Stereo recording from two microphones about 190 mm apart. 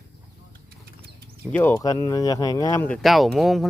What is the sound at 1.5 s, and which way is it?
Speech, 10° left (ahead or behind).